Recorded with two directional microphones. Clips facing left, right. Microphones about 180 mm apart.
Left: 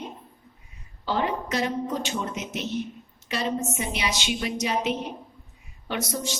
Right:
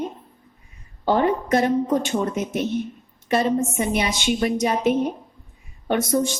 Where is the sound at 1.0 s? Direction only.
50° right (ahead or behind).